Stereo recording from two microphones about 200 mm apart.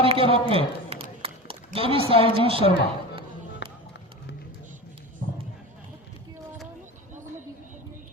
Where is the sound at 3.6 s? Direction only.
60° left (ahead or behind).